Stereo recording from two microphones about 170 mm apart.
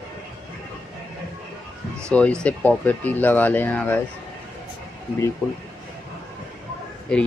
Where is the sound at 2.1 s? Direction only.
5° left (ahead or behind).